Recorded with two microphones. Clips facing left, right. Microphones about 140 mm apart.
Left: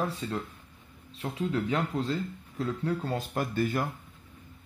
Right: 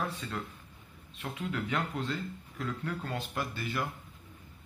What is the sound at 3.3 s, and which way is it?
Speech, 45° left (ahead or behind).